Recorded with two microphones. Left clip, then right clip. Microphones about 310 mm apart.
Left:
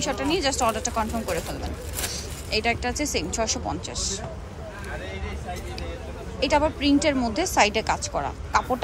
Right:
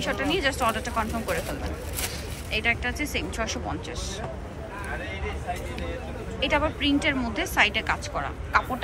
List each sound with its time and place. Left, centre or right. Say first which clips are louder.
0.0 s a woman's voice: left 1 dB; centre
6.4 s a woman's voice: left 3 dB; centre